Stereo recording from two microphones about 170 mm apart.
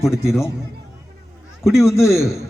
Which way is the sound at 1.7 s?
15° left (ahead or behind).